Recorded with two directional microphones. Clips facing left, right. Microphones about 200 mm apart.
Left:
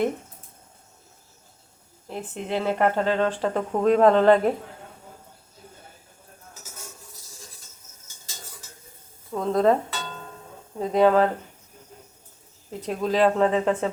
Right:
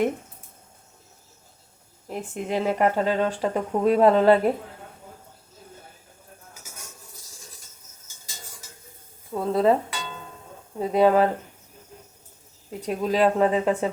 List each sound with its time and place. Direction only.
2.0 s speech: 10° right (ahead or behind)
9.3 s music: 5° right (ahead or behind)
10.8 s speech: 10° right (ahead or behind)
12.8 s speech: 10° right (ahead or behind)